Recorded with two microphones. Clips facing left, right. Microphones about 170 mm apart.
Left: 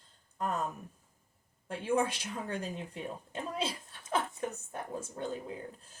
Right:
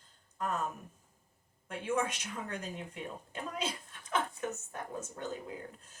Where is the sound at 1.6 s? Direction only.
30° left (ahead or behind).